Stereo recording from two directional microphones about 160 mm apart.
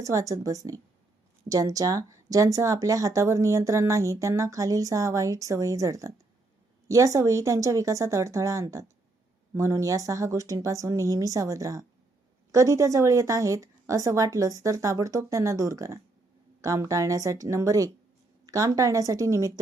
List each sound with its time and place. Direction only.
0.0 s speech: 20° right (ahead or behind)